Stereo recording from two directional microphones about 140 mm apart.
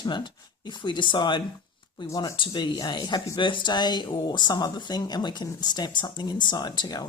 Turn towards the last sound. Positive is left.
turn(degrees=30)  # may be behind; listen again after turning